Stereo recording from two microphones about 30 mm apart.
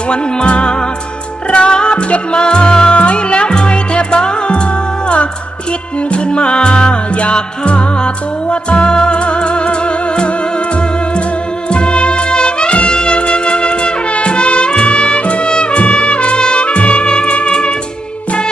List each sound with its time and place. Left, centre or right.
0.1 s music: left
6.1 s music: left
11.7 s music: left